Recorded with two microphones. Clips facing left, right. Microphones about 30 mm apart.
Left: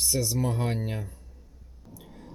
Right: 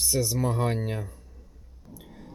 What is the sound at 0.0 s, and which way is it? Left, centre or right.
Speech, centre.